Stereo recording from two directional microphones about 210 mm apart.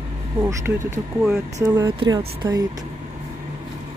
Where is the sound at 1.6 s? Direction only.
20° right (ahead or behind).